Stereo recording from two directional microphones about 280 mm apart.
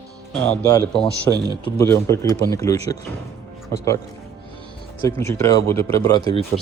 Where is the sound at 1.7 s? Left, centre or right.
Centre.